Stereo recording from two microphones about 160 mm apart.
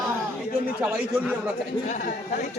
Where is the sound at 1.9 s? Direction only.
55° left (ahead or behind).